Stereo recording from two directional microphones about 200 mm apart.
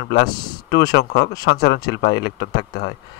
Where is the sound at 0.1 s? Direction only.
55° left (ahead or behind).